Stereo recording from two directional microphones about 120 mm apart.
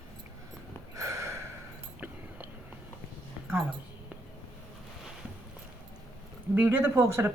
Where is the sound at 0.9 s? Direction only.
25° right (ahead or behind).